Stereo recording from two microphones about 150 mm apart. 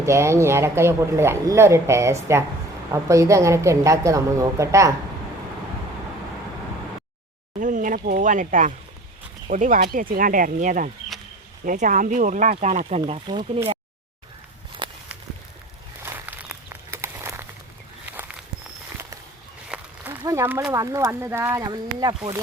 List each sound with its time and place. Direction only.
0.0 s a woman's voice: 20° right (ahead or behind)
7.6 s speech: 60° right (ahead or behind)
13.0 s speech: 35° right (ahead or behind)
14.8 s walk: 35° right (ahead or behind)
16.0 s walk: 15° right (ahead or behind)
16.6 s a sound: 20° right (ahead or behind)
18.1 s walk: 10° right (ahead or behind)
19.7 s a sound: 5° right (ahead or behind)
20.2 s a sound: 20° right (ahead or behind)
20.7 s a woman's voice: 20° right (ahead or behind)